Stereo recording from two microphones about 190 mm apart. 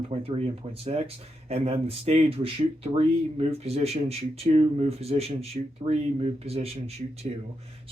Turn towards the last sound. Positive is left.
turn(degrees=-35)  # may be behind; listen again after turning